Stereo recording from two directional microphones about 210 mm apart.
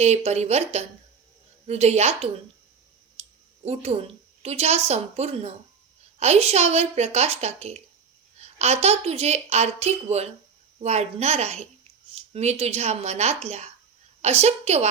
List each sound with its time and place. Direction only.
0.0 s a woman's voice: 30° right (ahead or behind)